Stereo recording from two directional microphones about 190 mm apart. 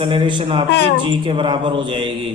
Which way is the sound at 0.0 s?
25° right (ahead or behind).